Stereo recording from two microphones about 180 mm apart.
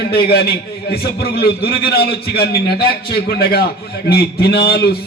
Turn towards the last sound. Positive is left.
turn(degrees=60)  # may be behind; listen again after turning